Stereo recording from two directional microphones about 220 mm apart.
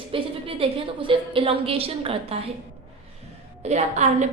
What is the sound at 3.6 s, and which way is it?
Speech, 30° right (ahead or behind).